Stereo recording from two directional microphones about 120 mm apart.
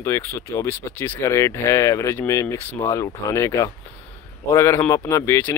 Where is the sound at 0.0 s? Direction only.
20° left (ahead or behind).